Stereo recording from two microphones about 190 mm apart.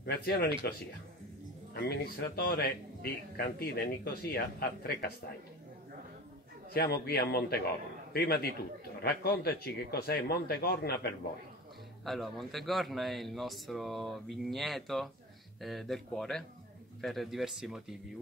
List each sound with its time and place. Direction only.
0.0 s a man's voice: 55° left (ahead or behind)
6.7 s a man's voice: 55° left (ahead or behind)
12.0 s a man's voice: centre (ahead or behind)